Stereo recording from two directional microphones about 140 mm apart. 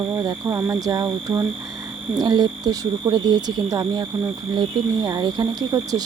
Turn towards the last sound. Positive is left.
turn(degrees=-30)  # may be behind; listen again after turning